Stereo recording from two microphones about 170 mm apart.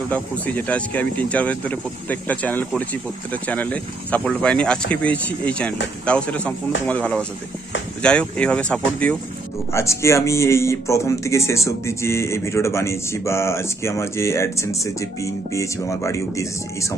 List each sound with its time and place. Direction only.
0.1 s speech: 10° left (ahead or behind)